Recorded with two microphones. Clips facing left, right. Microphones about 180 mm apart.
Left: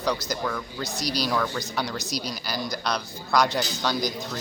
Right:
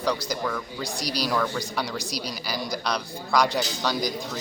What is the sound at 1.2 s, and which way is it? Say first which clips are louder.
A man's voice: right 3 dB; 5° right (ahead or behind).